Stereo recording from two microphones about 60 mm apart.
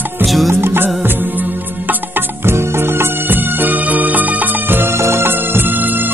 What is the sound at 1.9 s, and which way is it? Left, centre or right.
Music, right.